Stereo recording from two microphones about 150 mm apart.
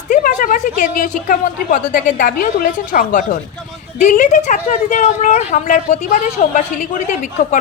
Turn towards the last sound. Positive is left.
turn(degrees=55)  # may be behind; listen again after turning